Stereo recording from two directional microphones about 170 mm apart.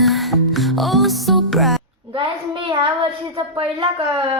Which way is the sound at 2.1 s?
30° right (ahead or behind).